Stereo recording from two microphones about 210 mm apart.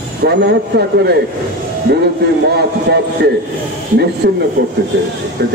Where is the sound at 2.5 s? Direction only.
50° right (ahead or behind).